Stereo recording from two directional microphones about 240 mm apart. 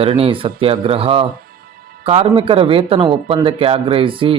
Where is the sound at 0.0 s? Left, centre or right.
Right.